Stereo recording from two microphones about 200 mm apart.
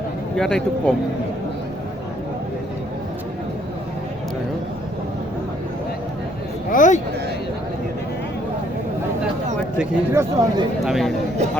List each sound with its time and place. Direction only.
0.3 s speech: 5° left (ahead or behind)
6.7 s speech: 40° left (ahead or behind)
9.7 s speech: 15° right (ahead or behind)
10.8 s speech: centre (ahead or behind)